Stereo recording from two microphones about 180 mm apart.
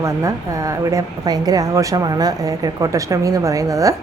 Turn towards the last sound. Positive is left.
turn(degrees=-20)  # may be behind; listen again after turning